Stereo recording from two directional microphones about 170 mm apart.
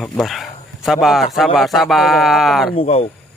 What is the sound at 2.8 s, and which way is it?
Speech, 35° left (ahead or behind).